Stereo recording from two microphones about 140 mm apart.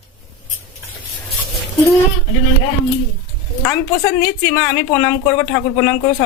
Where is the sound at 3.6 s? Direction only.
20° left (ahead or behind).